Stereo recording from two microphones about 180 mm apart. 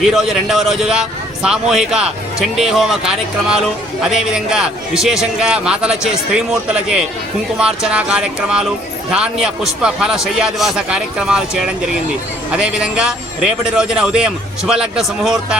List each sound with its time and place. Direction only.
0.0 s a man's voice: centre (ahead or behind)